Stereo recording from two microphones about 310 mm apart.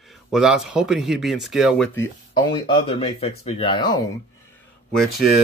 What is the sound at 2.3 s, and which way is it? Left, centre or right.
Speech, centre.